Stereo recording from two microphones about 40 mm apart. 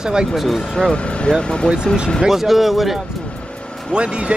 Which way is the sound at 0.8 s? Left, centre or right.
Left.